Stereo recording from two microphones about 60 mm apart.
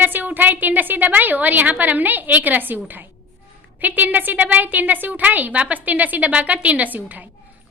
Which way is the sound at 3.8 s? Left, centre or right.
Right.